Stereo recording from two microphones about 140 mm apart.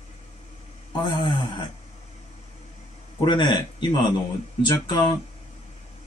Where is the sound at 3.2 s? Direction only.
35° left (ahead or behind).